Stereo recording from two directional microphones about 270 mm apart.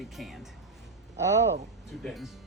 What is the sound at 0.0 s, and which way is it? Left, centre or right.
Speech, centre.